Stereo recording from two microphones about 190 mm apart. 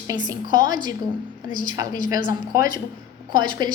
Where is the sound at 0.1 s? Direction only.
20° right (ahead or behind).